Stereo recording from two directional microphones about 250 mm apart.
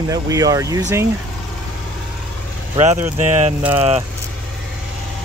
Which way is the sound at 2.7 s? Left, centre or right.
Right.